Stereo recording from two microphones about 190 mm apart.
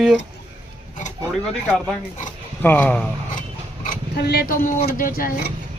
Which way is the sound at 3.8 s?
60° left (ahead or behind).